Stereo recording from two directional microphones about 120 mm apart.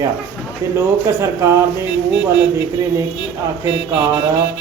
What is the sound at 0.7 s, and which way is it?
Speech, 25° right (ahead or behind).